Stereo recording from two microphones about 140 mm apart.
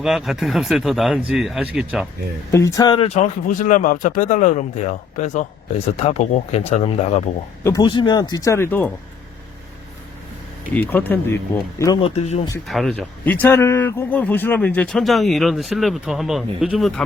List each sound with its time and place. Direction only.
0.0 s speech: centre (ahead or behind)
2.5 s speech: 20° left (ahead or behind)
3.0 s speech: 50° left (ahead or behind)
6.0 s speech: 50° left (ahead or behind)
7.6 s speech: 25° left (ahead or behind)
10.8 s speech: 15° left (ahead or behind)
11.9 s speech: 45° left (ahead or behind)
12.6 s speech: centre (ahead or behind)